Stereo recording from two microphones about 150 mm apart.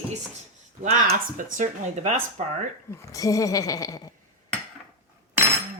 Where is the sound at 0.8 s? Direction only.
55° right (ahead or behind).